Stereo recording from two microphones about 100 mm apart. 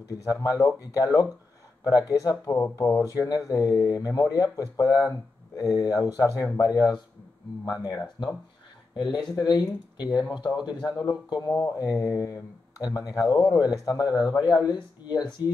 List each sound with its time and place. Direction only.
0.3 s mantra: 35° left (ahead or behind)
3.0 s speech: 25° right (ahead or behind)
3.4 s mantra: 35° left (ahead or behind)
8.9 s speech: 45° left (ahead or behind)
11.0 s mantra: 45° left (ahead or behind)
14.3 s speech: 50° left (ahead or behind)